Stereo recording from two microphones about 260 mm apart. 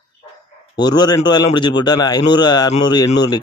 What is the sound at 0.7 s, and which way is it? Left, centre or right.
A man's voice, centre.